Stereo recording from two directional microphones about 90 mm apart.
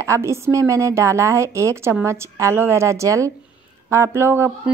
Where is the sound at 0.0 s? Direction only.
30° right (ahead or behind).